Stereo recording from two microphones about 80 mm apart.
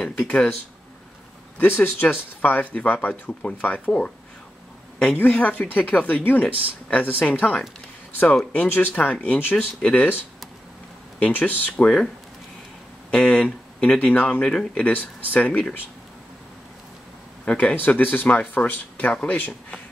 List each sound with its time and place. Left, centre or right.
0.2 s speech: centre
1.6 s speech: left
13.1 s speech: centre
17.5 s speech: centre